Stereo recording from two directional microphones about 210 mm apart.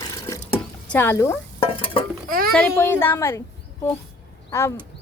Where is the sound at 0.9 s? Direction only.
10° left (ahead or behind).